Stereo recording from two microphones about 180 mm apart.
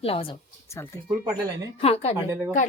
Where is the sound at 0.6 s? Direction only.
15° left (ahead or behind).